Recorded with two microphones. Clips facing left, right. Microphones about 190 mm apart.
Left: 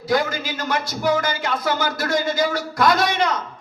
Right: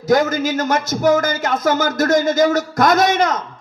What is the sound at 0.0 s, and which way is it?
Speech, 45° right (ahead or behind).